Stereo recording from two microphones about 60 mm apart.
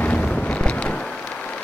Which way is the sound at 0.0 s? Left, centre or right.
Left.